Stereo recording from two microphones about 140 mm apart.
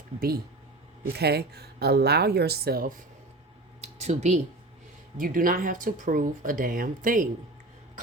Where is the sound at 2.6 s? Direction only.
90° right.